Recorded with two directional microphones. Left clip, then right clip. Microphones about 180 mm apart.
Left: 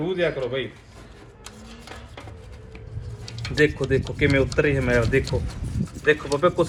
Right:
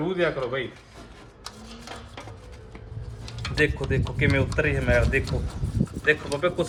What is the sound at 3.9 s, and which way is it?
A man's voice, 15° left (ahead or behind).